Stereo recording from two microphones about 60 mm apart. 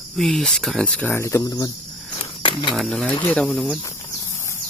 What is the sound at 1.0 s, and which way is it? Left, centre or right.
Speech, left.